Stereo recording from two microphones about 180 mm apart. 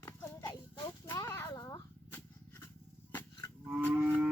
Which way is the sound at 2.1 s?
10° left (ahead or behind).